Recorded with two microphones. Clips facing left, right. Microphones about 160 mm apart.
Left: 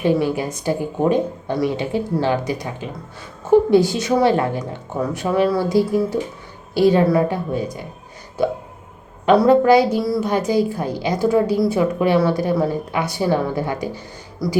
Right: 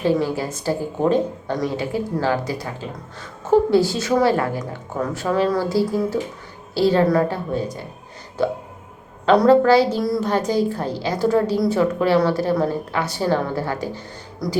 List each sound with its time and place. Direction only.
0.0 s a woman's voice: 15° left (ahead or behind)
4.9 s a woman's voice: 10° left (ahead or behind)
9.5 s a woman's voice: 15° left (ahead or behind)
14.4 s speech: centre (ahead or behind)